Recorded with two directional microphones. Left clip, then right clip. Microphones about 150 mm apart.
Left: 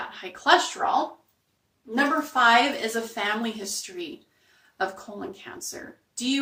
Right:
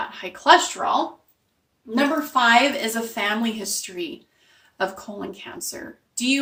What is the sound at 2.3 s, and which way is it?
Speech, 30° right (ahead or behind).